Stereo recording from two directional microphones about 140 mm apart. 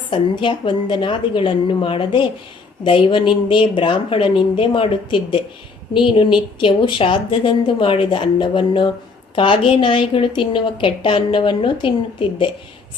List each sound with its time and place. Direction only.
0.1 s a woman's voice: 35° left (ahead or behind)